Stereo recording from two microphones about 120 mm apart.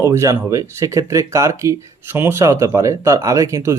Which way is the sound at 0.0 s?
25° right (ahead or behind).